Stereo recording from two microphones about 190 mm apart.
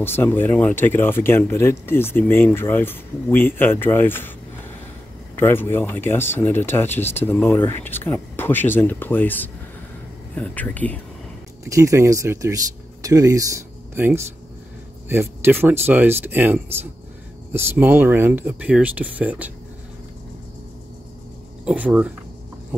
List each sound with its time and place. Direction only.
0.0 s speech: 10° left (ahead or behind)
5.3 s speech: 10° left (ahead or behind)
11.6 s speech: 15° right (ahead or behind)
21.6 s speech: 5° right (ahead or behind)